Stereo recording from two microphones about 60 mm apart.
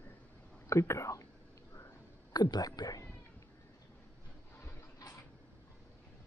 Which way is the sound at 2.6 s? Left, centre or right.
Left.